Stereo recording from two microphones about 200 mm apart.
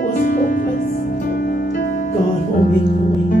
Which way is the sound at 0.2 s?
45° left (ahead or behind).